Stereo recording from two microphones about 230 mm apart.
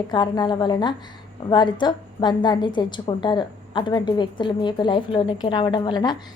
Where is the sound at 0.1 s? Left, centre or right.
Centre.